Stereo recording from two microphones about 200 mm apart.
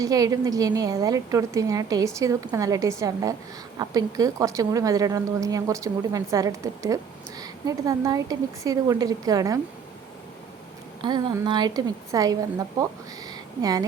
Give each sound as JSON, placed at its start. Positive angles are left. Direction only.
{"t": 0.0, "sound": "a woman's voice", "side_deg": -15}
{"t": 11.0, "sound": "a woman's voice", "side_deg": -25}
{"t": 13.3, "sound": "a sound", "side_deg": -20}